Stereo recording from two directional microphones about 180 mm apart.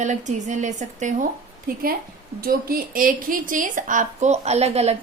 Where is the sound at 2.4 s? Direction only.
55° right (ahead or behind).